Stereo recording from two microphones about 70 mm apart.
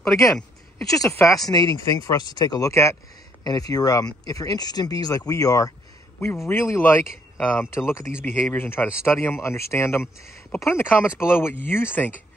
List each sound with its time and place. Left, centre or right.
0.0 s a sound: centre
0.8 s speech: left
2.7 s speech: left
3.4 s speech: left
6.2 s speech: left
6.8 s speech: left
7.7 s speech: left